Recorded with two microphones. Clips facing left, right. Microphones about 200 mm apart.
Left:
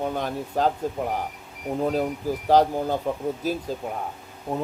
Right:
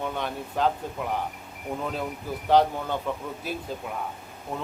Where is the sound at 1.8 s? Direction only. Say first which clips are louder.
Left 9 dB; 40° left (ahead or behind).